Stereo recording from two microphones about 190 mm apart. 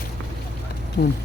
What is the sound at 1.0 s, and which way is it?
Speech, 60° left (ahead or behind).